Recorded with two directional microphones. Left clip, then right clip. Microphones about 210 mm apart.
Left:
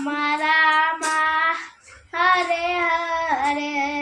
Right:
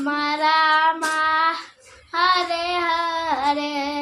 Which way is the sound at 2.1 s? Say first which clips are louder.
Even; 25° right (ahead or behind).